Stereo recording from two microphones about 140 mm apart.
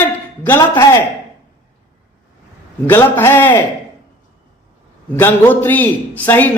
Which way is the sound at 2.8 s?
15° left (ahead or behind).